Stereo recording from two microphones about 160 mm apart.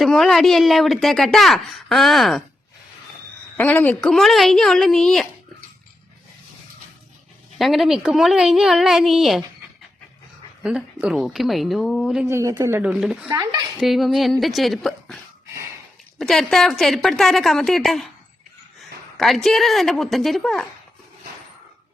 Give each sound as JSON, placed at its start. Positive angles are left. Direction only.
{"t": 0.0, "sound": "speech", "side_deg": 0}
{"t": 3.6, "sound": "speech", "side_deg": 10}
{"t": 7.6, "sound": "speech", "side_deg": 0}
{"t": 10.6, "sound": "speech", "side_deg": -5}
{"t": 12.2, "sound": "speech", "side_deg": -20}
{"t": 12.8, "sound": "speech", "side_deg": -5}
{"t": 13.2, "sound": "a woman's voice", "side_deg": -20}
{"t": 13.7, "sound": "a woman's voice", "side_deg": 0}